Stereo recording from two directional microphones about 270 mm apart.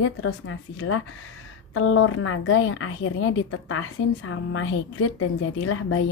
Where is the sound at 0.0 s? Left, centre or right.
Left.